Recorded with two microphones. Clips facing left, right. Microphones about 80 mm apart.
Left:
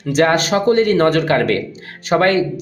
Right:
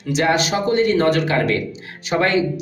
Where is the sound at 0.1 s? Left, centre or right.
Left.